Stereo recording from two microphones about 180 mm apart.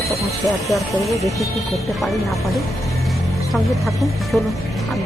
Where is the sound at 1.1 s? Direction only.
15° left (ahead or behind).